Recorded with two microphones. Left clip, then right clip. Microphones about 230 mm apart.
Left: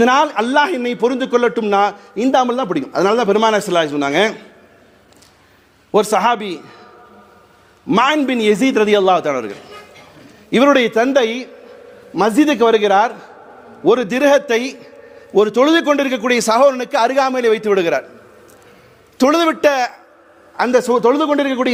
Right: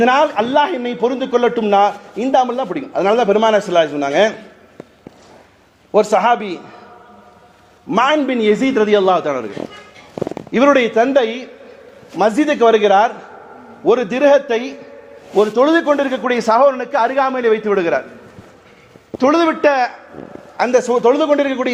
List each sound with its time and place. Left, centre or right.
0.0 s a man's voice: left
5.9 s a man's voice: left
7.9 s a man's voice: left
10.5 s a man's voice: left
19.1 s a man's voice: left